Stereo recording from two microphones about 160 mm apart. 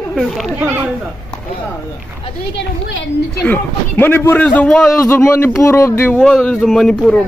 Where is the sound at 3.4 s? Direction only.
10° left (ahead or behind).